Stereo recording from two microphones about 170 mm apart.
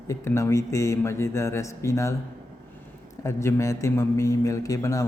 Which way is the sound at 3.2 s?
15° left (ahead or behind).